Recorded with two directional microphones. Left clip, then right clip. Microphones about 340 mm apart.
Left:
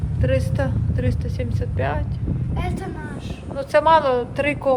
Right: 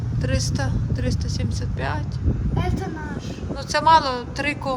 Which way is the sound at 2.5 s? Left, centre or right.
Right.